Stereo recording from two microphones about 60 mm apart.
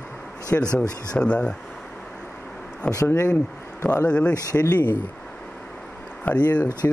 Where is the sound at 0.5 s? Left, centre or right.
Left.